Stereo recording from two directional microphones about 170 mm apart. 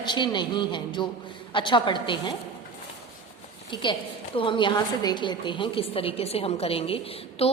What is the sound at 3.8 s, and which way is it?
A woman's voice, 30° left (ahead or behind).